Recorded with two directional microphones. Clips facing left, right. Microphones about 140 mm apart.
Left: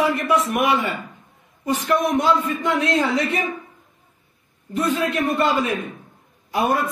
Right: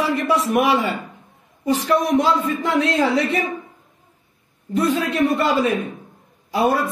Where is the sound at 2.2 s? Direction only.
30° right (ahead or behind).